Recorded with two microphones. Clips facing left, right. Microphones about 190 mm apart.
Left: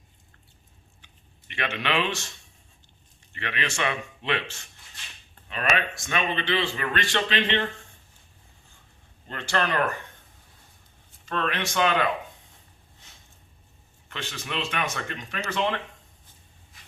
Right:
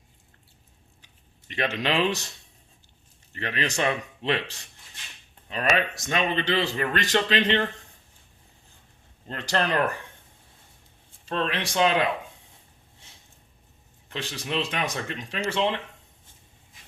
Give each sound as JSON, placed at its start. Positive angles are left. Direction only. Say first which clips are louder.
{"t": 1.0, "sound": "speech", "louder": "right 5 dB", "side_deg": -35}
{"t": 3.3, "sound": "a man's voice", "louder": "right 3 dB", "side_deg": -35}
{"t": 9.3, "sound": "a man's voice", "louder": "right 1 dB", "side_deg": -30}
{"t": 11.3, "sound": "a man's voice", "louder": "right 1 dB", "side_deg": -30}
{"t": 14.1, "sound": "a man's voice", "louder": "right 4 dB", "side_deg": -35}